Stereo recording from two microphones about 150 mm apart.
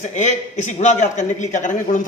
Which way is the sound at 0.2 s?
50° left (ahead or behind).